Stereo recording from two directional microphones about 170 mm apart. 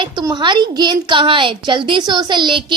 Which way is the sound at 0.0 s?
25° right (ahead or behind).